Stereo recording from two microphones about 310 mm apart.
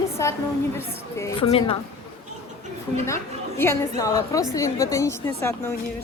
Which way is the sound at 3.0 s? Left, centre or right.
Centre.